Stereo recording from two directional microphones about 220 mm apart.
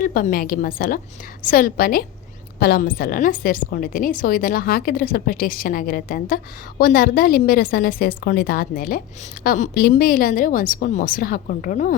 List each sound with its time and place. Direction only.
0.0 s a woman's voice: 40° left (ahead or behind)